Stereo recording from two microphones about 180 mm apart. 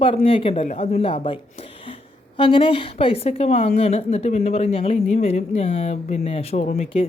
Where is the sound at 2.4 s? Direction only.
30° left (ahead or behind).